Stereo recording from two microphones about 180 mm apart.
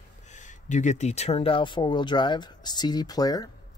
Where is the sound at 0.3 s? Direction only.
45° left (ahead or behind).